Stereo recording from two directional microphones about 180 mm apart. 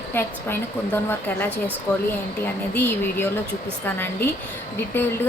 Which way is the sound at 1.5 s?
10° right (ahead or behind).